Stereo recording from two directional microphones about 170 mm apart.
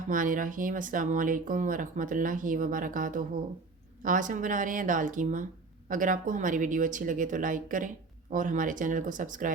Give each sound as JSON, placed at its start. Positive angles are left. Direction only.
{"t": 0.1, "sound": "speech", "side_deg": -50}